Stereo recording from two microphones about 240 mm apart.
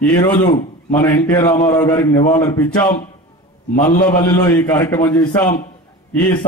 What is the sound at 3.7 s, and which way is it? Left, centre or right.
Speech, left.